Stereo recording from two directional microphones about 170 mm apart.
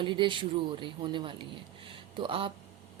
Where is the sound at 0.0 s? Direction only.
30° right (ahead or behind).